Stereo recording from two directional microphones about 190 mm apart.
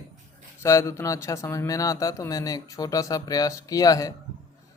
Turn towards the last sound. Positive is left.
turn(degrees=20)  # may be behind; listen again after turning